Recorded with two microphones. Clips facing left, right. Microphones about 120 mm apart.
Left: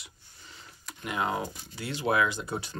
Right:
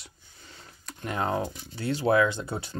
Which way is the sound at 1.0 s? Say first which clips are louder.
Right 2 dB; 35° right (ahead or behind).